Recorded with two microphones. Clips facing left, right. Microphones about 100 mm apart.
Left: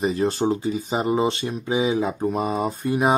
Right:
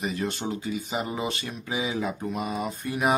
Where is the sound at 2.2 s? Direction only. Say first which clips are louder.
Left 7 dB; 35° left (ahead or behind).